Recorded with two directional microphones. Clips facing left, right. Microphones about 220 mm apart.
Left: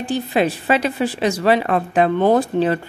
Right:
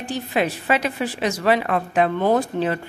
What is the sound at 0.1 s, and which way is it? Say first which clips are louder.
A woman's voice: left 4 dB; 30° left (ahead or behind).